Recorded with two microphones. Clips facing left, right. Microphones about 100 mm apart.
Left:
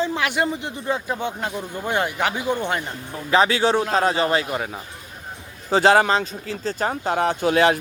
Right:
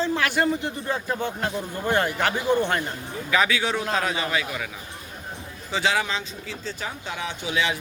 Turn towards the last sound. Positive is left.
turn(degrees=55)  # may be behind; listen again after turning